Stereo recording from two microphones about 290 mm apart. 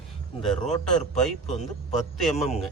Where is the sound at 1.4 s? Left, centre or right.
Left.